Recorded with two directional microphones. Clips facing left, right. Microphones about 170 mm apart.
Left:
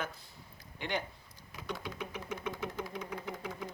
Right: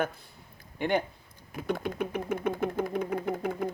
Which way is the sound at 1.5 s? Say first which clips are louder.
Right 10 dB; 55° right (ahead or behind).